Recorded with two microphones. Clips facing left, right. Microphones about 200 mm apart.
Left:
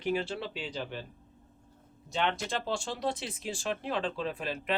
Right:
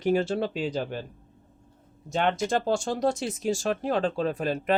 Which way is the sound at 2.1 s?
50° right (ahead or behind).